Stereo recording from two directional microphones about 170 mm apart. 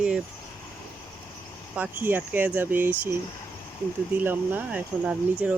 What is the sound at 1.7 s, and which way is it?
Speech, 10° right (ahead or behind).